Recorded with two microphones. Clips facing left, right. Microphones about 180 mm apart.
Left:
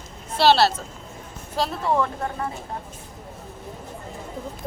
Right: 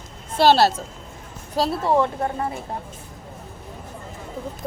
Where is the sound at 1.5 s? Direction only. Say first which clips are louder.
Right 3 dB; 30° right (ahead or behind).